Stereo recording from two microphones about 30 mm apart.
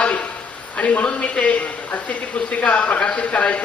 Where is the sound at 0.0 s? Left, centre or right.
Left.